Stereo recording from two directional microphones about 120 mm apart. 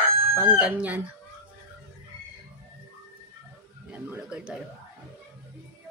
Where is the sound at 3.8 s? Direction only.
15° right (ahead or behind).